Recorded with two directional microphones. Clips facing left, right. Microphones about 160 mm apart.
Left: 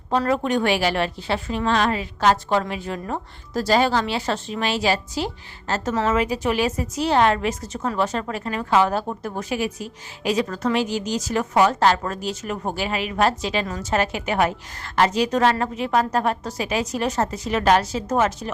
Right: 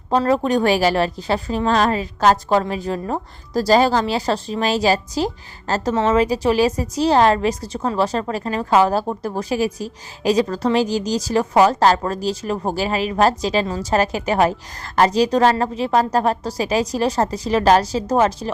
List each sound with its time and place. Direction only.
0.1 s a woman's voice: 35° right (ahead or behind)